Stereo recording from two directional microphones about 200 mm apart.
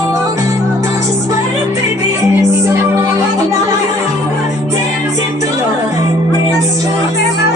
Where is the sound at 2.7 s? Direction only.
15° right (ahead or behind).